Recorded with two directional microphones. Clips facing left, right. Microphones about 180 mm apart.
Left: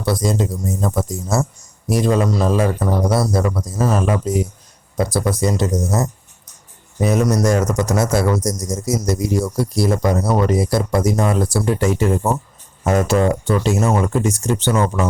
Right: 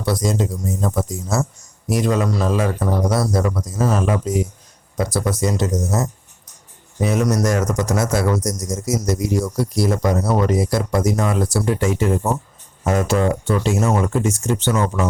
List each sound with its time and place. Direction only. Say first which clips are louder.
0.1 s speech: left 1 dB; 30° left (ahead or behind)